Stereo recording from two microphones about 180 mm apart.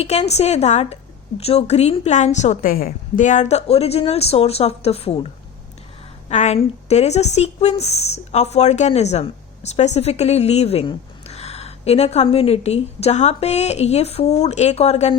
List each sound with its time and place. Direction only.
0.0 s a woman's voice: 35° left (ahead or behind)